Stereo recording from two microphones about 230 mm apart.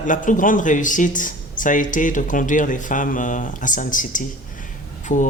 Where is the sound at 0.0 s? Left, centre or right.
Left.